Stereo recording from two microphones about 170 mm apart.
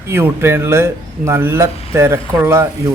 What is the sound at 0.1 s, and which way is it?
A man's voice, 15° right (ahead or behind).